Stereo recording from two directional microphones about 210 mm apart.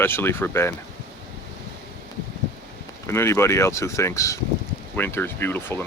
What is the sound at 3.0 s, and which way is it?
Speech, 10° left (ahead or behind).